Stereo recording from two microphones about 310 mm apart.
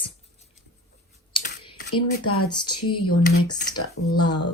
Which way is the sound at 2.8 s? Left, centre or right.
Left.